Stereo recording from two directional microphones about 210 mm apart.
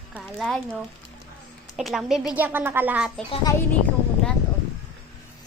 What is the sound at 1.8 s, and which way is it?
Speech, centre (ahead or behind).